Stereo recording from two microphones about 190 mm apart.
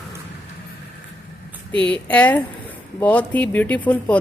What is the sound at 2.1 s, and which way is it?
Speech, 10° left (ahead or behind).